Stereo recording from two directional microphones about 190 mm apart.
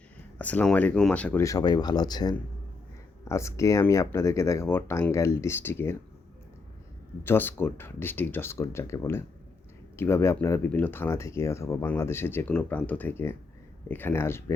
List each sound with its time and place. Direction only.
0.3 s speech: 10° left (ahead or behind)
7.3 s speech: 10° left (ahead or behind)